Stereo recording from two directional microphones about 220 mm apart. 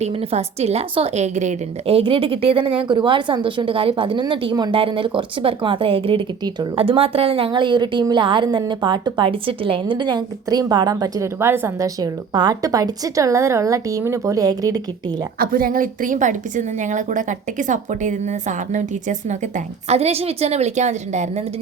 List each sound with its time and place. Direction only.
0.0 s a woman's voice: 25° right (ahead or behind)
15.4 s a woman's voice: 40° right (ahead or behind)